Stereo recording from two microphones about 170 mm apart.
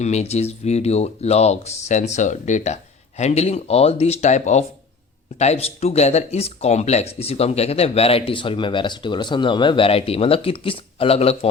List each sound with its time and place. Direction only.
0.0 s speech: 40° left (ahead or behind)